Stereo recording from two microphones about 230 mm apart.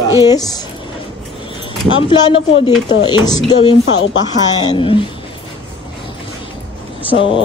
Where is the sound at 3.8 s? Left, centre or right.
Left.